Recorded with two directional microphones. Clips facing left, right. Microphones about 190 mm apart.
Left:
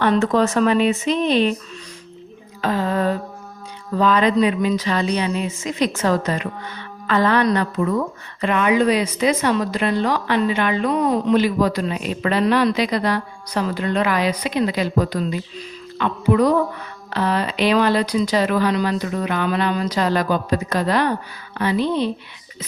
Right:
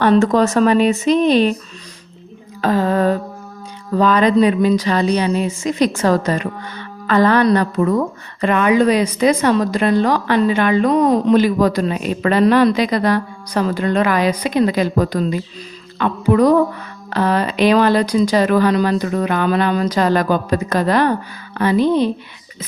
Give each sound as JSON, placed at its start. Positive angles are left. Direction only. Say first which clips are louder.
{"t": 0.0, "sound": "speech", "louder": "right 4 dB", "side_deg": -40}
{"t": 2.6, "sound": "a woman's voice", "louder": "right 5 dB", "side_deg": -45}